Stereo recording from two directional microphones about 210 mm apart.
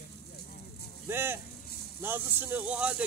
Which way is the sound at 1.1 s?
10° right (ahead or behind).